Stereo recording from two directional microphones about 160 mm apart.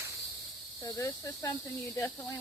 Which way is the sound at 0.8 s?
20° left (ahead or behind).